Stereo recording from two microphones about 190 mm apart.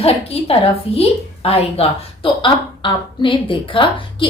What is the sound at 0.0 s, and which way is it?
A woman's voice, 30° left (ahead or behind).